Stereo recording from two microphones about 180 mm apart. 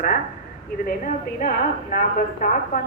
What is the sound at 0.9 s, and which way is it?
A woman's voice, 50° left (ahead or behind).